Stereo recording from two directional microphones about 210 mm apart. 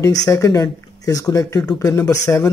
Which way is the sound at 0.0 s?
15° left (ahead or behind).